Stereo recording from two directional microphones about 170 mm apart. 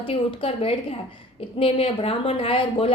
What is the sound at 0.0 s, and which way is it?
A woman's voice, 30° left (ahead or behind).